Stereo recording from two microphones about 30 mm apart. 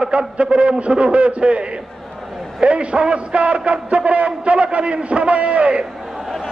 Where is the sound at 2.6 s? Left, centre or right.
Right.